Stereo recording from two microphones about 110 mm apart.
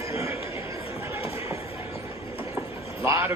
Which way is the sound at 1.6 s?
65° left (ahead or behind).